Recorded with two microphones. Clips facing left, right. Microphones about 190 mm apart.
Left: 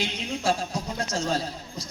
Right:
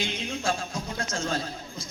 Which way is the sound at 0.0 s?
35° left (ahead or behind).